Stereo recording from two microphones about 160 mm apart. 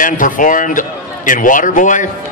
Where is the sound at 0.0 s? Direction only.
55° left (ahead or behind).